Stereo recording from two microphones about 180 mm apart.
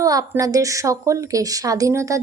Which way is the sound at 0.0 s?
20° right (ahead or behind).